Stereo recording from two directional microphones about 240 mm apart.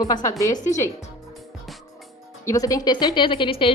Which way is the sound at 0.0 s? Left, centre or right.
Centre.